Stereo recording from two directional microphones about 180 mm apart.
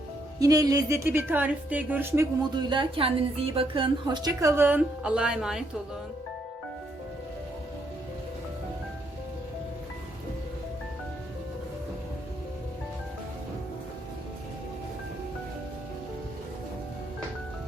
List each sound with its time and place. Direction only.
0.3 s a woman's voice: 20° right (ahead or behind)
2.6 s a woman's voice: 25° right (ahead or behind); by 5.6 s 5° right (ahead or behind)